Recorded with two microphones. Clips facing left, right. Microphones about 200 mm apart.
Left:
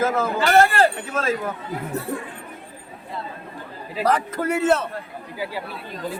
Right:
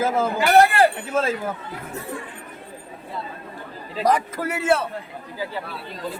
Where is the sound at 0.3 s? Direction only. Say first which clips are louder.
Right 1 dB; 15° right (ahead or behind).